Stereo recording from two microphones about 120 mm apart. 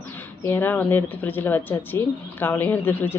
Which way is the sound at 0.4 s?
20° left (ahead or behind).